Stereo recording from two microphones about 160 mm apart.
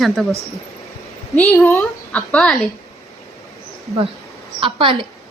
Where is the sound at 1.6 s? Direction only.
15° left (ahead or behind).